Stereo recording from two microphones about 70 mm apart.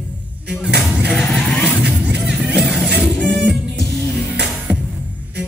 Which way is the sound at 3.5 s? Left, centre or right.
Centre.